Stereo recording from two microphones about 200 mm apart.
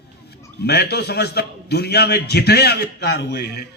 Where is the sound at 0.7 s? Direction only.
55° left (ahead or behind).